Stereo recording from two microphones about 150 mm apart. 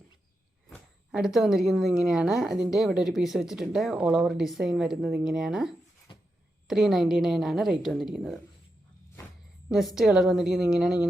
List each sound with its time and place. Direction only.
1.1 s a woman's voice: 5° right (ahead or behind)
6.1 s a sound: 35° left (ahead or behind)
6.7 s a woman's voice: centre (ahead or behind)
9.6 s a woman's voice: centre (ahead or behind)